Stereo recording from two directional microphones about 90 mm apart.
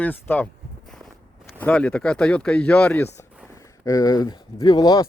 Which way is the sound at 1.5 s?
15° left (ahead or behind).